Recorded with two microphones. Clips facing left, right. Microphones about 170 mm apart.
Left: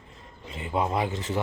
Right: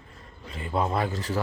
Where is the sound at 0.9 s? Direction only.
15° left (ahead or behind).